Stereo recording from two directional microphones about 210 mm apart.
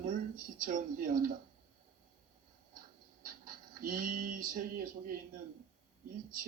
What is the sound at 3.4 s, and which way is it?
Speech, 40° right (ahead or behind).